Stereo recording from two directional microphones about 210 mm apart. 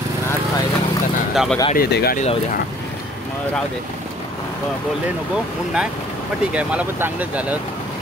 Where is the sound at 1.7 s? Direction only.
45° left (ahead or behind).